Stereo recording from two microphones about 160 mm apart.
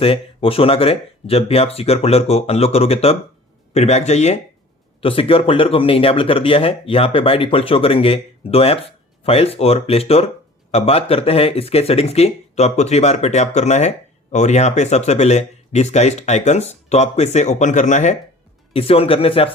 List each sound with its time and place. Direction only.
0.0 s speech: 35° left (ahead or behind)
18.7 s speech: 35° left (ahead or behind)